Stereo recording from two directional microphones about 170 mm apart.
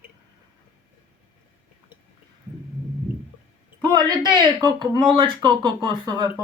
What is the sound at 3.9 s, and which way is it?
Speech, 25° right (ahead or behind).